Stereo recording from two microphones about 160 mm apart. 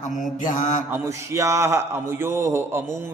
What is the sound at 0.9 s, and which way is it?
A man's voice, 20° right (ahead or behind).